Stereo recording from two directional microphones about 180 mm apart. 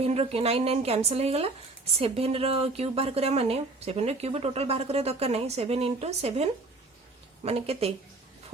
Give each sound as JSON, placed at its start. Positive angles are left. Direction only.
{"t": 0.0, "sound": "a woman's voice", "side_deg": -35}